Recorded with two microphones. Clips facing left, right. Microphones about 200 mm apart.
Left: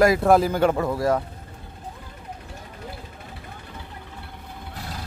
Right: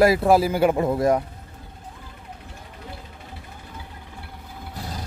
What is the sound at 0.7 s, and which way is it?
Speech, 20° right (ahead or behind).